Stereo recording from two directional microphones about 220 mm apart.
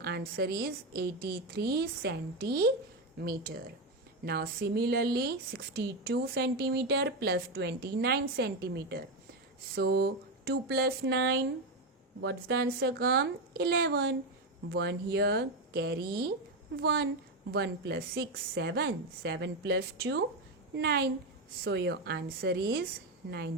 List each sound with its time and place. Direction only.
0.0 s speech: 45° right (ahead or behind)